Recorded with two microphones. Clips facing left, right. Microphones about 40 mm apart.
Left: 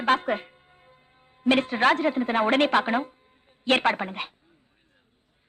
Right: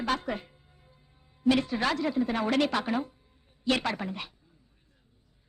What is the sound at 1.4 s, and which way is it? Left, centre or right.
A man's voice, left.